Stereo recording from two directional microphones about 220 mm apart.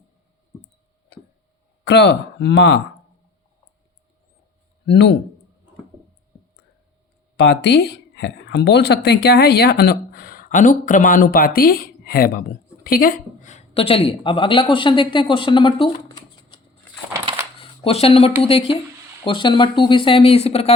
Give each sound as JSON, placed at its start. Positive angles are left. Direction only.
{"t": 1.8, "sound": "speech", "side_deg": 50}
{"t": 4.9, "sound": "speech", "side_deg": 50}
{"t": 7.3, "sound": "speech", "side_deg": 50}
{"t": 17.6, "sound": "camera", "side_deg": 25}
{"t": 18.4, "sound": "speech", "side_deg": 25}